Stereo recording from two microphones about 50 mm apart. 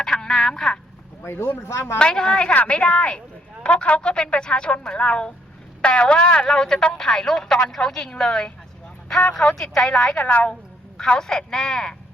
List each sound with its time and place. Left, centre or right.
0.0 s telephone: centre
1.2 s speech: left
2.0 s speech: centre
10.2 s speech: left
11.0 s speech: centre